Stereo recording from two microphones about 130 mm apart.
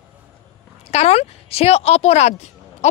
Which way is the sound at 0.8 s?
55° left (ahead or behind).